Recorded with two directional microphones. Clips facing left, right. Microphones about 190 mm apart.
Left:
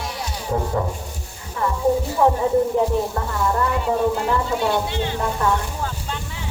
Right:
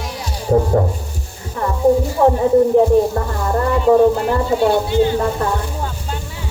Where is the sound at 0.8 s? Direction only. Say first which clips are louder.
Right 6 dB; 40° right (ahead or behind).